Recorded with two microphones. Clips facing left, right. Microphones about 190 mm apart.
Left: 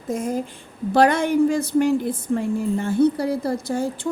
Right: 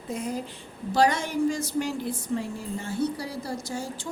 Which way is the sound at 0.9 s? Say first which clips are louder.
Left 7 dB; 60° left (ahead or behind).